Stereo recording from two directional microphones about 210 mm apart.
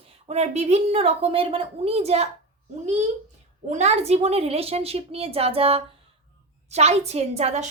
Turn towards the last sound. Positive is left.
turn(degrees=-30)  # may be behind; listen again after turning